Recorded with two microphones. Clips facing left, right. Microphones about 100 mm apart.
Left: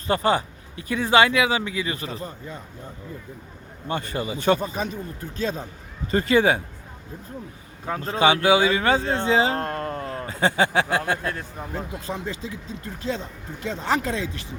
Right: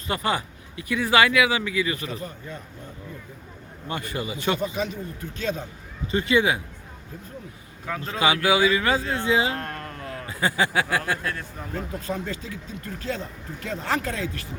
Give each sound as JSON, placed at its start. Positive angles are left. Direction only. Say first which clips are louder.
{"t": 0.1, "sound": "speech", "louder": "left 5 dB", "side_deg": 30}
{"t": 3.8, "sound": "speech", "louder": "left 3 dB", "side_deg": 30}
{"t": 7.9, "sound": "speech", "louder": "left 4 dB", "side_deg": 35}